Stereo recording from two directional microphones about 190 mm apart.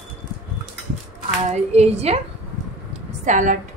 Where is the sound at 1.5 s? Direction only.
35° right (ahead or behind).